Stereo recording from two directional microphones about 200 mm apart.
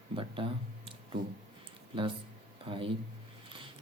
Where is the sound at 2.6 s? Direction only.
25° right (ahead or behind).